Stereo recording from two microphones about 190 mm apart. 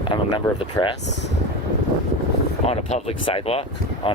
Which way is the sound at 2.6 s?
35° left (ahead or behind).